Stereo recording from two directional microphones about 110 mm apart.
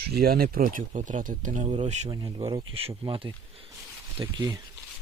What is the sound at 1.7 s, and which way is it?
Speech, 60° right (ahead or behind).